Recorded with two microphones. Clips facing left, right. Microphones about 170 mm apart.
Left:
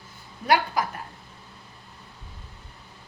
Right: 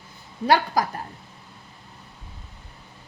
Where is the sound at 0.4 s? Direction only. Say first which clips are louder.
Right 3 dB; 35° right (ahead or behind).